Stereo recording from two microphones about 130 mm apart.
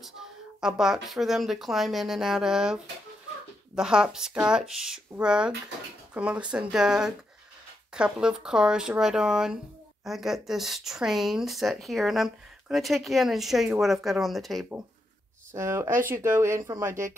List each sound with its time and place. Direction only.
0.0 s speech: 5° right (ahead or behind)
15.5 s speech: 20° right (ahead or behind)